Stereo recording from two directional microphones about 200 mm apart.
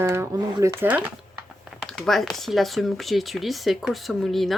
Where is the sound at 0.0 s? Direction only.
15° right (ahead or behind).